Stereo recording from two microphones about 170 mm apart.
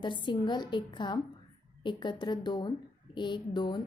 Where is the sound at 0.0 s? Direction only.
25° left (ahead or behind).